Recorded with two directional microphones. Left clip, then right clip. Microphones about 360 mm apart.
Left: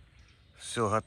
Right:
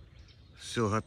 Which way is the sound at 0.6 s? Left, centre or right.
Centre.